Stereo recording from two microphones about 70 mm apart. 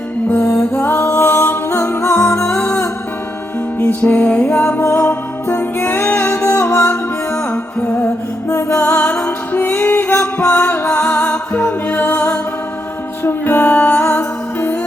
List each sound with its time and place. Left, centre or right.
0.3 s a capella: left
2.3 s music: left
3.8 s music: left
4.8 s music: left
7.5 s music: left
8.4 s music: left